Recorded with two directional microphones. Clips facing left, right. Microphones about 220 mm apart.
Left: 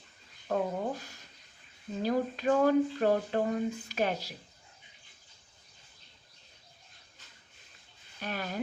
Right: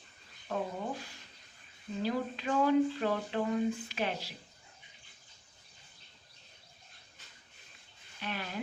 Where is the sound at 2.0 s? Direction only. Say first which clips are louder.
Left 4 dB; 45° left (ahead or behind).